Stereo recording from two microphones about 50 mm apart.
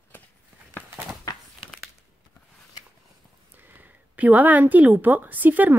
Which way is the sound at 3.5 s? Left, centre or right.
Right.